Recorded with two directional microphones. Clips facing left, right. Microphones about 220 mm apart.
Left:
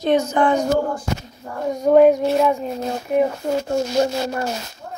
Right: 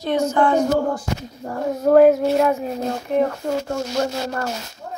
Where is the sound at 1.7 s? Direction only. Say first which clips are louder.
Even; centre (ahead or behind).